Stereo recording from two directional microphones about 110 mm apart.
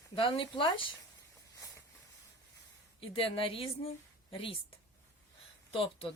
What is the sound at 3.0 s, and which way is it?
A woman's voice, 55° left (ahead or behind).